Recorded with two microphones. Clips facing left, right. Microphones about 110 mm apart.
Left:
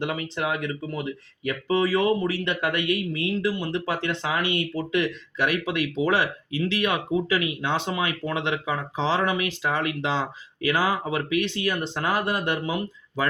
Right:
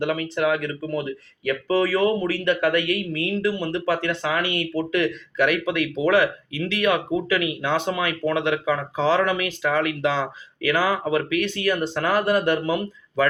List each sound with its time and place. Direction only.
0.0 s speech: 25° left (ahead or behind)